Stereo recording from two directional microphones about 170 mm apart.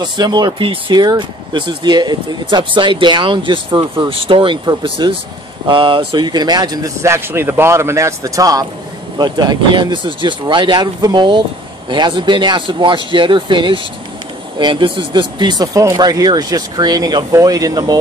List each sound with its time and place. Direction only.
0.0 s speech: 25° right (ahead or behind)